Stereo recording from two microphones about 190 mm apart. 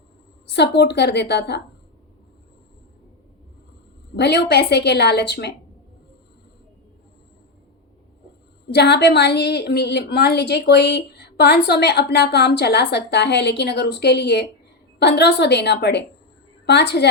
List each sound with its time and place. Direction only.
0.4 s a woman's voice: 60° left (ahead or behind)
4.1 s a woman's voice: 60° left (ahead or behind)
8.7 s a woman's voice: 60° left (ahead or behind)